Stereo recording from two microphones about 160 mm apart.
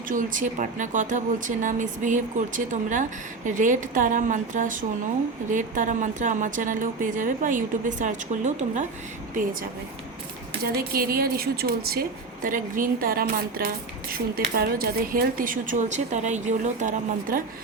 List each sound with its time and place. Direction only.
0.1 s speech: 55° right (ahead or behind)
9.3 s speech: 60° right (ahead or behind)